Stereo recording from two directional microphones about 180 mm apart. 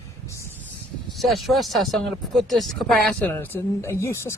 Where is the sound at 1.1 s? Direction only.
Centre (ahead or behind).